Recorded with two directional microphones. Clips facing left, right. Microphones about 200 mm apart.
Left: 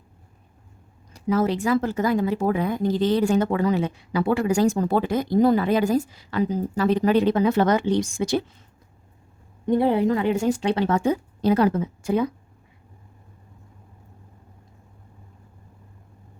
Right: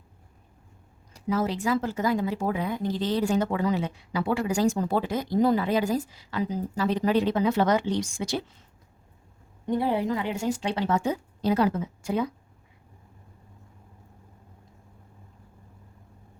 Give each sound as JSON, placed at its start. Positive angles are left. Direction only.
{"t": 1.1, "sound": "speech", "side_deg": 60}
{"t": 9.6, "sound": "speech", "side_deg": 55}